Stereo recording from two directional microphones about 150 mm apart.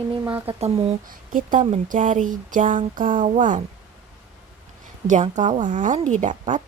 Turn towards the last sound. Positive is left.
turn(degrees=-55)  # may be behind; listen again after turning